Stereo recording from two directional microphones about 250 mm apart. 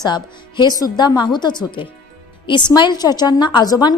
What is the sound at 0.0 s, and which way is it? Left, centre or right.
A woman's voice, centre.